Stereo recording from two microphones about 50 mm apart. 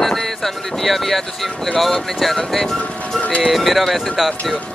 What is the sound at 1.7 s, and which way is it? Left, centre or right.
Speech, centre.